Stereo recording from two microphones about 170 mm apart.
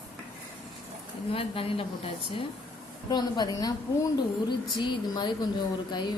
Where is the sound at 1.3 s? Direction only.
35° left (ahead or behind).